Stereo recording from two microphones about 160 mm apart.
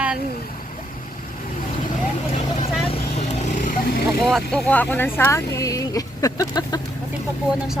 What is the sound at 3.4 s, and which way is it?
Vehicle, 55° left (ahead or behind).